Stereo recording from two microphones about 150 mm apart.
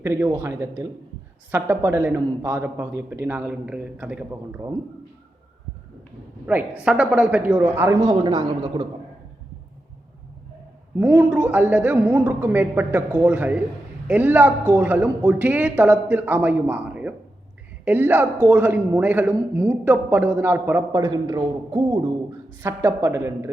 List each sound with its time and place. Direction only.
0.0 s speech: 15° right (ahead or behind)
6.4 s speech: 10° right (ahead or behind)
8.0 s a woman's voice: 30° right (ahead or behind)
10.9 s a man's voice: 15° right (ahead or behind)